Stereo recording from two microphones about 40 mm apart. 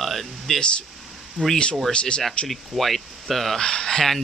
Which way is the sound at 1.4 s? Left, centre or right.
Left.